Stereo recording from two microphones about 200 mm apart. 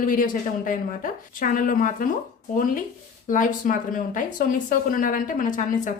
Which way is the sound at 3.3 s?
40° left (ahead or behind).